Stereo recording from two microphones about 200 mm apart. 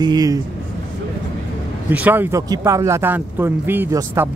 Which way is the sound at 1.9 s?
10° right (ahead or behind).